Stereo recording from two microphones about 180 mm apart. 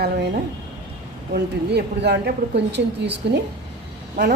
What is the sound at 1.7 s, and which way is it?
A woman's voice, 65° right (ahead or behind).